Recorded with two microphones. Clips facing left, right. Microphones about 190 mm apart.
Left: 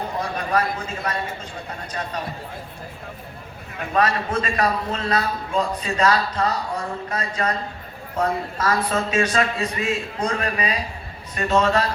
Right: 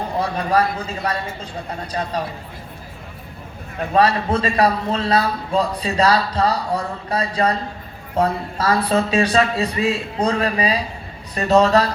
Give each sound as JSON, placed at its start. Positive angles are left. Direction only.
{"t": 0.2, "sound": "a man's voice", "side_deg": -35}
{"t": 3.9, "sound": "a man's voice", "side_deg": -30}